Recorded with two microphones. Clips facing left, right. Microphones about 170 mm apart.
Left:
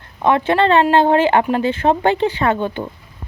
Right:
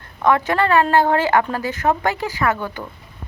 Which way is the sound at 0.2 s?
25° left (ahead or behind).